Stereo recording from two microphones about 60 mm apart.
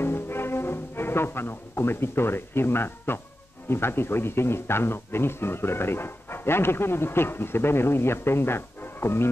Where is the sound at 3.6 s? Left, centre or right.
Left.